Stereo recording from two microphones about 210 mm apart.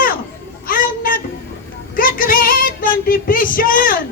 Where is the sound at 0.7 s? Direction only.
40° left (ahead or behind).